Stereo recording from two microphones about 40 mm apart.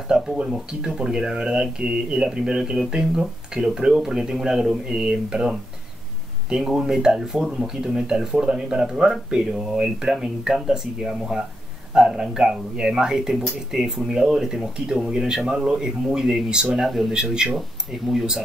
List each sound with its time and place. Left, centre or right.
0.1 s speech: centre
6.5 s speech: centre
16.7 s speech: centre
17.1 s speech: centre
17.6 s speech: centre